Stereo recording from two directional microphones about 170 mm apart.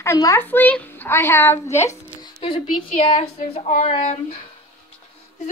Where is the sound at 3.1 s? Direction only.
40° left (ahead or behind).